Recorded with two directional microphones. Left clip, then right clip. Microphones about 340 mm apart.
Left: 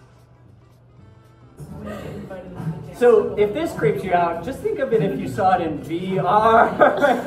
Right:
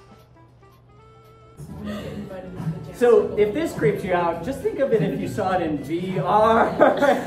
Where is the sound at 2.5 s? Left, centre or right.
Centre.